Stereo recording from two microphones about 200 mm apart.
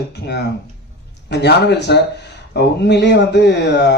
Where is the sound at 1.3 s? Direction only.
55° left (ahead or behind).